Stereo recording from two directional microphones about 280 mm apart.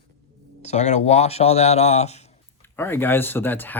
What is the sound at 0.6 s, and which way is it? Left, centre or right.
Speech, left.